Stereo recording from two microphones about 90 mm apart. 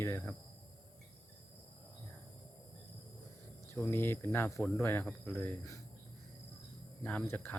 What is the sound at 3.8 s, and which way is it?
Speech, 25° left (ahead or behind).